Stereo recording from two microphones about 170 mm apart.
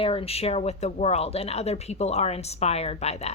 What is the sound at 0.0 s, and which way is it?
A woman's voice, 35° left (ahead or behind).